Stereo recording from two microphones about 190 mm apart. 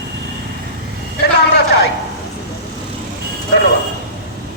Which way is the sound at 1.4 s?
60° left (ahead or behind).